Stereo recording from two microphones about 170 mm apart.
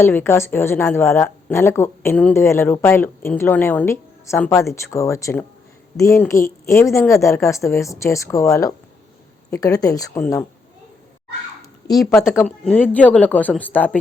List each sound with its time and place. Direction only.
0.0 s a woman's voice: 15° left (ahead or behind)
12.4 s a woman's voice: 5° left (ahead or behind)